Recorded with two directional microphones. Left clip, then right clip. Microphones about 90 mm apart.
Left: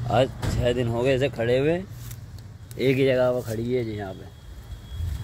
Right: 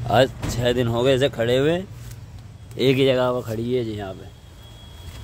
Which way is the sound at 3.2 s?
20° right (ahead or behind).